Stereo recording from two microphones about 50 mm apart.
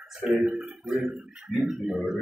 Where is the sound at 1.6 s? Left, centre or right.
Centre.